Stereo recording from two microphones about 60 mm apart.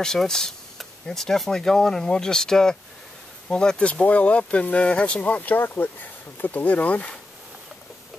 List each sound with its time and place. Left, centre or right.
0.0 s speech: centre